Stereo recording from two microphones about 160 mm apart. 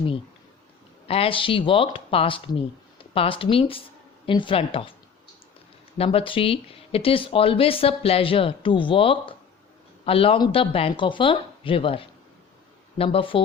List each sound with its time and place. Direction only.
1.0 s speech: 35° left (ahead or behind)
6.0 s speech: 35° left (ahead or behind)